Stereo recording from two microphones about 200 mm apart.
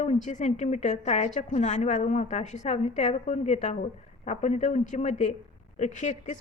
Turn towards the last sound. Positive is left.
turn(degrees=35)  # may be behind; listen again after turning